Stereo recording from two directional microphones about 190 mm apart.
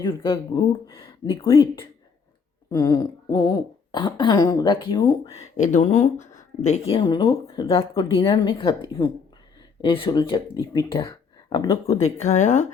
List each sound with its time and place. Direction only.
0.0 s speech: 25° left (ahead or behind)
2.6 s speech: 20° left (ahead or behind); by 12.6 s 40° left (ahead or behind)